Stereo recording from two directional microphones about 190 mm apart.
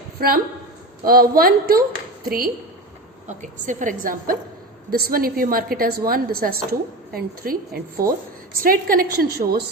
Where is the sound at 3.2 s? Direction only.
40° right (ahead or behind).